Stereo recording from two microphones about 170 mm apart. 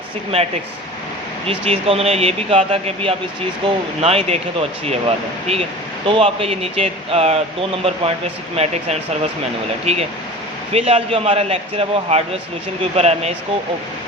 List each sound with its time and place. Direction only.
1.5 s speech: 35° right (ahead or behind)